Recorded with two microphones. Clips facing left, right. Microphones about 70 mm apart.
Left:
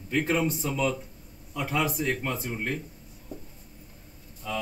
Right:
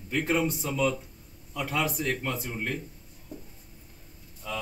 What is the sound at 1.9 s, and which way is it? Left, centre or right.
Speech, centre.